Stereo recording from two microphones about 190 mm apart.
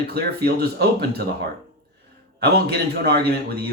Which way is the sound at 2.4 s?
60° right (ahead or behind).